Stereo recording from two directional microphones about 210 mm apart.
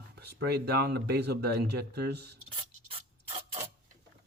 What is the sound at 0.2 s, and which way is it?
Speech, 50° right (ahead or behind).